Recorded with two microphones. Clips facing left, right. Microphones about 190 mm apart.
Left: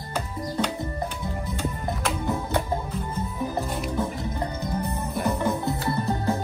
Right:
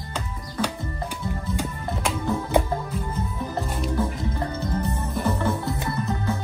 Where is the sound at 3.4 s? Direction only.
10° left (ahead or behind).